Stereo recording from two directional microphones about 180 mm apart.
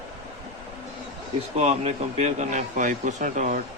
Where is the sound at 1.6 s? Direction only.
35° right (ahead or behind).